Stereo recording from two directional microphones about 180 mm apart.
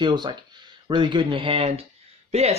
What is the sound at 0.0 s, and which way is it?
Speech, 25° right (ahead or behind).